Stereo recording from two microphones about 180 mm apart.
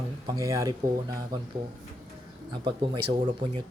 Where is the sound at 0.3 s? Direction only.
20° right (ahead or behind).